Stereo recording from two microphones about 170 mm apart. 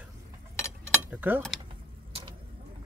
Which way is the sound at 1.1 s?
10° right (ahead or behind).